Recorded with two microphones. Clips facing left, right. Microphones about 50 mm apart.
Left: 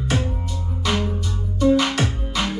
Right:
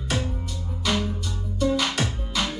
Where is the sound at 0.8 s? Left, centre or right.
Centre.